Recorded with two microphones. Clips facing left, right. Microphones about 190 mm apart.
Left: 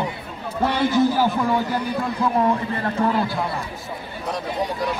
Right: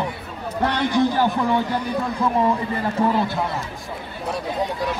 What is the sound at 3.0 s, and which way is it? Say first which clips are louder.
Speech: right 1 dB; 25° right (ahead or behind).